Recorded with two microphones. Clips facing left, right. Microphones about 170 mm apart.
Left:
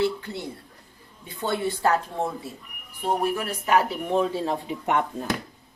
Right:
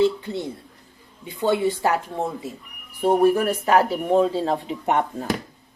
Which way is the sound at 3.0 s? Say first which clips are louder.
Right 8 dB; 45° right (ahead or behind).